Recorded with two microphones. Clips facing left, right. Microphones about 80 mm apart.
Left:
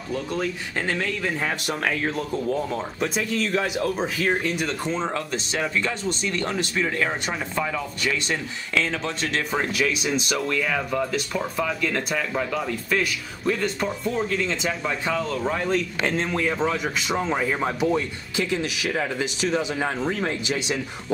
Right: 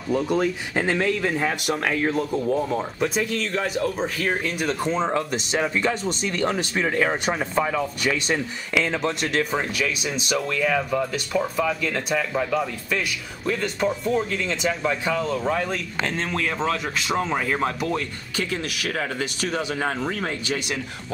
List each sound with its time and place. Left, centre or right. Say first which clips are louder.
0.1 s speech: right 5 dB; centre
5.1 s speech: right 3 dB; centre
9.3 s speech: right 1 dB; centre
17.1 s speech: right 1 dB; centre
17.6 s speech: left 3 dB; centre
18.5 s speech: left 2 dB; right